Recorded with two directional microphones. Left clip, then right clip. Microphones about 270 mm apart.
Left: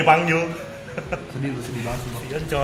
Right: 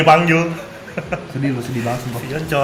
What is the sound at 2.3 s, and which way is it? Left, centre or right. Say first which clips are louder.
Speech: right 5 dB; centre.